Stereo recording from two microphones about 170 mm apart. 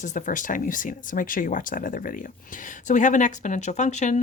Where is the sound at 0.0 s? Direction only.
50° left (ahead or behind).